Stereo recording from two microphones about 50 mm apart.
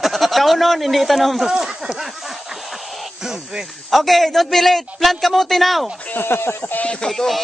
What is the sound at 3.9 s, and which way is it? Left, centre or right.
Speech, centre.